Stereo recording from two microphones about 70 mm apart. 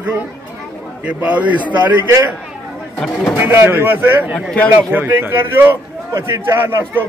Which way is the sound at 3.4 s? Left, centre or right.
Right.